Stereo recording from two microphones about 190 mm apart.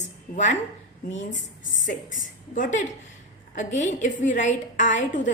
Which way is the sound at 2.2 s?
40° left (ahead or behind).